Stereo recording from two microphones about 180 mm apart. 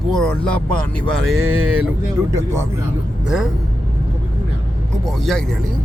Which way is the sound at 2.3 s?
15° right (ahead or behind).